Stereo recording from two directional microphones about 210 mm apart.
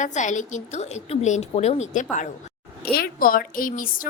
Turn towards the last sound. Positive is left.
turn(degrees=40)  # may be behind; listen again after turning